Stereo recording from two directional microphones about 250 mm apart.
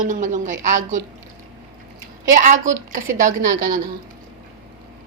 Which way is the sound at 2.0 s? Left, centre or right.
Right.